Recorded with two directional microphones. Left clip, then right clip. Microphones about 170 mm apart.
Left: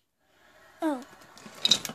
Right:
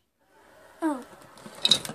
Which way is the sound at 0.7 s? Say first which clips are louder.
Right 1 dB; 40° left (ahead or behind).